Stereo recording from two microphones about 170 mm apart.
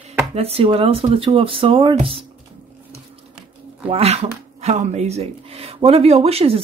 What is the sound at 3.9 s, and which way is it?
Speech, 35° right (ahead or behind).